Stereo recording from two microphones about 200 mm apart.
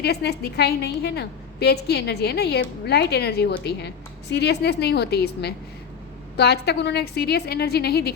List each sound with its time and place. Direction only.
0.0 s a woman's voice: 55° left (ahead or behind)